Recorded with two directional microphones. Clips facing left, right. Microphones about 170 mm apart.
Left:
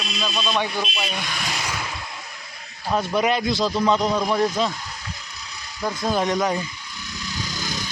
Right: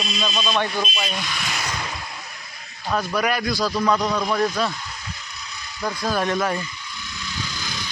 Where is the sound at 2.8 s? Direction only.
25° left (ahead or behind).